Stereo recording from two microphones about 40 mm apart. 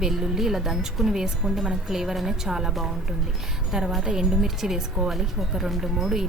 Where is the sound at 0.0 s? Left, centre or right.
Centre.